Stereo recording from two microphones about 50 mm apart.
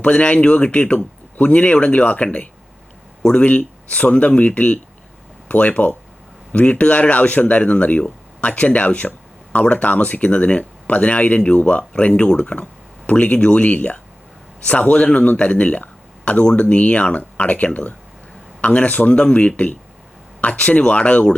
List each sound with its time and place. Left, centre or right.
0.0 s speech: left